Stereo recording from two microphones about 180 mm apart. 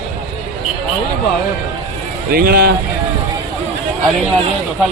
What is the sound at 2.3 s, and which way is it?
Speech, 55° right (ahead or behind).